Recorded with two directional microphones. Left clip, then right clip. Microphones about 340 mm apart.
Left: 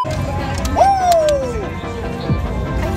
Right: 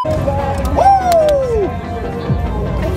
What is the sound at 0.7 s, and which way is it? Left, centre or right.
Music, centre.